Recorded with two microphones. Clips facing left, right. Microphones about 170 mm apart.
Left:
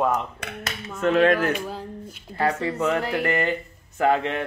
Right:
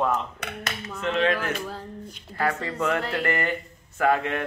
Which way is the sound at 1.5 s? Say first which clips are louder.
Left 2 dB; 15° left (ahead or behind).